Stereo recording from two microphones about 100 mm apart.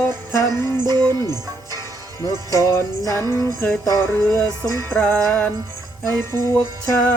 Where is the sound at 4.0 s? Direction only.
25° left (ahead or behind).